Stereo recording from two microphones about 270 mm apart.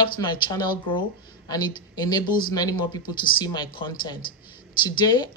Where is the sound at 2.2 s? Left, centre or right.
Left.